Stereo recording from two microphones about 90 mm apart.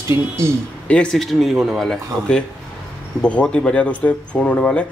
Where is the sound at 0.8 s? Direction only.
10° left (ahead or behind).